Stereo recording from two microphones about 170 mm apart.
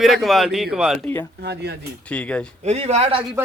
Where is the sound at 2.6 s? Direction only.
40° right (ahead or behind).